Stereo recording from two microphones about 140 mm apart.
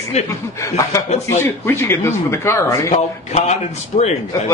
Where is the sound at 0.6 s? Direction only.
20° left (ahead or behind).